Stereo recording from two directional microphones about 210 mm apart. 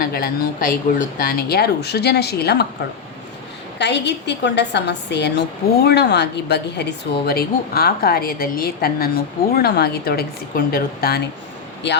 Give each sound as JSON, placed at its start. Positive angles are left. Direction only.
{"t": 0.0, "sound": "a woman's voice", "side_deg": 45}
{"t": 3.8, "sound": "a woman's voice", "side_deg": 55}